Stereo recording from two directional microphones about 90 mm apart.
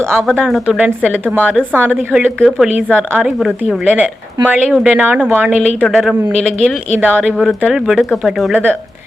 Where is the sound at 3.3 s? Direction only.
Centre (ahead or behind).